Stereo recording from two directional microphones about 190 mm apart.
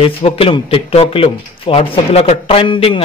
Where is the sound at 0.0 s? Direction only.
30° left (ahead or behind).